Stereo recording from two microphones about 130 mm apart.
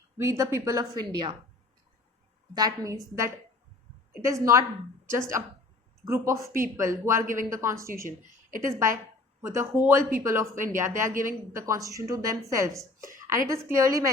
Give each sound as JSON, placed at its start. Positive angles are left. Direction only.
{"t": 0.2, "sound": "a woman's voice", "side_deg": -20}
{"t": 2.6, "sound": "a woman's voice", "side_deg": -30}